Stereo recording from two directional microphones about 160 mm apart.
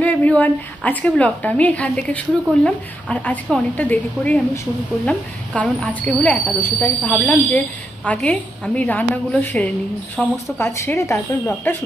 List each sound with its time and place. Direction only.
0.0 s speech: 10° left (ahead or behind)